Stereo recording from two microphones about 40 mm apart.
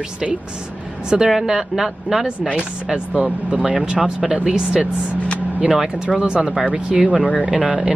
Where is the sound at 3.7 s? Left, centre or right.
Right; by 6.0 s centre.